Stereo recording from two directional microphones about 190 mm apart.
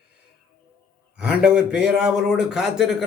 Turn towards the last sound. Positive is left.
turn(degrees=0)  # may be behind; listen again after turning